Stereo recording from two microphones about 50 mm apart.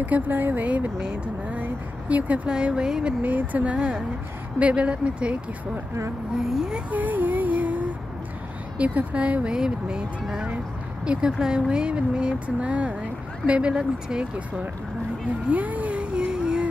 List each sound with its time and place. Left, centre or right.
0.0 s speech: right
2.5 s speech: centre
3.2 s speech: right
6.3 s speech: centre
6.9 s music: right
8.7 s speech: right
11.1 s speech: centre
15.5 s a sound: right